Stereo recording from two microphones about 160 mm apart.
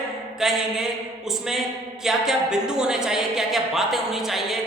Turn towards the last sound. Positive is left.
turn(degrees=0)  # may be behind; listen again after turning